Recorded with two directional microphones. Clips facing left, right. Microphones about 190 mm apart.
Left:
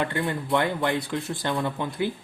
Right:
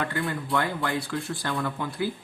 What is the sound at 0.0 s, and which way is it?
Speech, 25° left (ahead or behind).